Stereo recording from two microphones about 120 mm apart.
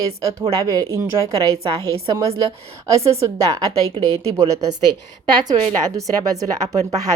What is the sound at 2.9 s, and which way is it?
Speech, 25° right (ahead or behind).